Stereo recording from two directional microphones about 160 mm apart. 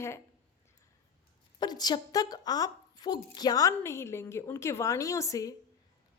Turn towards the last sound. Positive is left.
turn(degrees=20)  # may be behind; listen again after turning